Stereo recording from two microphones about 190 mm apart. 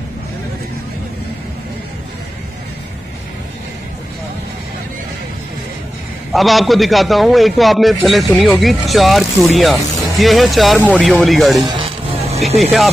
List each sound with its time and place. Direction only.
6.3 s a man's voice: centre (ahead or behind)
11.6 s music: 25° right (ahead or behind)